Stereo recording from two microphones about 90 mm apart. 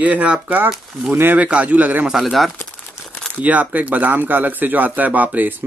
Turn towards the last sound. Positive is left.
turn(degrees=-20)  # may be behind; listen again after turning